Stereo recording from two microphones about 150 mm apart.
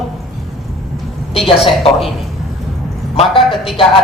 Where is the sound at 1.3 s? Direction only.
40° left (ahead or behind).